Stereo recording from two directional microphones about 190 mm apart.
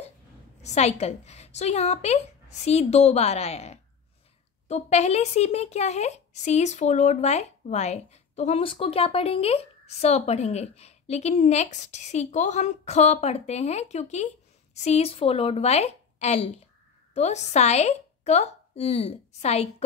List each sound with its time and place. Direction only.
0.6 s a woman's voice: 35° left (ahead or behind)